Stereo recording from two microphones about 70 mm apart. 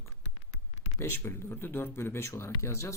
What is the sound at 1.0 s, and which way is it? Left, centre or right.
Speech, left.